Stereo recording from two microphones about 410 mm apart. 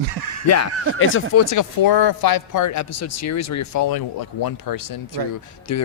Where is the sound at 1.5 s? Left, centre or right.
Left.